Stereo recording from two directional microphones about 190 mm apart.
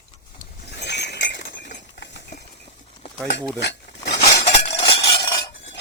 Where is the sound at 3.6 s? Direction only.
65° left (ahead or behind).